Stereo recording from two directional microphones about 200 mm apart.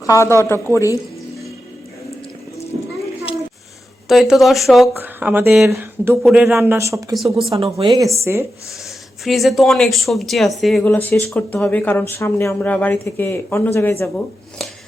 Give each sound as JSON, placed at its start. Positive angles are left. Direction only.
{"t": 0.0, "sound": "speech", "side_deg": 15}
{"t": 4.1, "sound": "speech", "side_deg": 0}
{"t": 7.3, "sound": "speech", "side_deg": -25}
{"t": 9.2, "sound": "speech", "side_deg": 0}